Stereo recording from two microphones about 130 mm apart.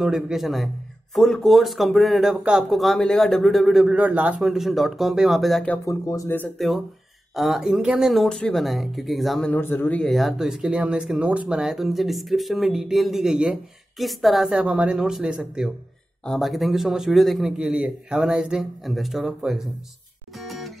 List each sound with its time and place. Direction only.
0.0 s speech: 5° right (ahead or behind)
5.9 s speech: 25° left (ahead or behind)
6.6 s speech: centre (ahead or behind)
9.5 s speech: 15° left (ahead or behind)
10.0 s speech: centre (ahead or behind)
20.3 s music: centre (ahead or behind)